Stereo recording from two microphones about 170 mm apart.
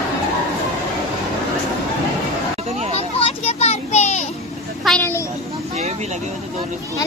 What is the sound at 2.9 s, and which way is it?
Children playing, 35° left (ahead or behind).